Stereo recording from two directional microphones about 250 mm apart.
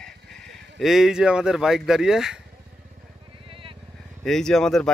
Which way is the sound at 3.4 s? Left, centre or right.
Right.